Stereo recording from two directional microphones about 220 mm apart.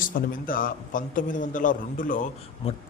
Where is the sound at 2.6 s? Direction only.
25° left (ahead or behind).